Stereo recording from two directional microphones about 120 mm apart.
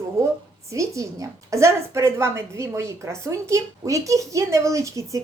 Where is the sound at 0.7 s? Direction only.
25° right (ahead or behind).